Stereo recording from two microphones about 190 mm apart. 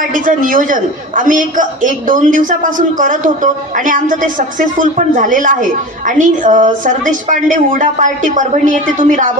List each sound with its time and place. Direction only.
0.1 s a woman's voice: 45° right (ahead or behind)